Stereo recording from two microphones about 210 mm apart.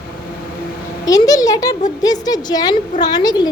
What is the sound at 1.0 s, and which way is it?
A woman's voice, 15° left (ahead or behind).